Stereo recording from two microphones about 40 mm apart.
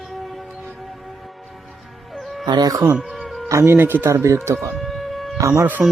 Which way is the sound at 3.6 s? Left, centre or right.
Right.